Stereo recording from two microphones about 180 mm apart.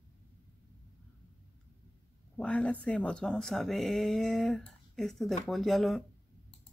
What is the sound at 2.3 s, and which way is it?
Speech, 5° left (ahead or behind).